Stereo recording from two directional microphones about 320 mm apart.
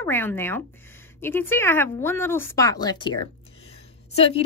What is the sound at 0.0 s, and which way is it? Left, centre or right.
Speech, centre.